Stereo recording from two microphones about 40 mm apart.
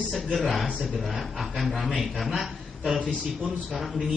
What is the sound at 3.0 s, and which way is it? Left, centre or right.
Speech, right.